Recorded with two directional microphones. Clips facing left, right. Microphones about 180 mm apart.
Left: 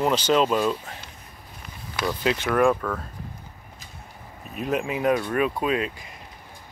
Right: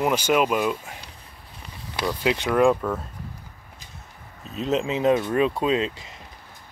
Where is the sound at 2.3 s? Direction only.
20° right (ahead or behind).